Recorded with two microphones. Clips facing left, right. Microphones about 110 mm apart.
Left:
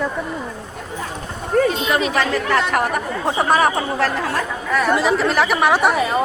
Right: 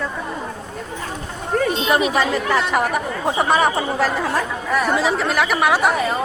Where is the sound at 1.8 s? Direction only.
20° right (ahead or behind).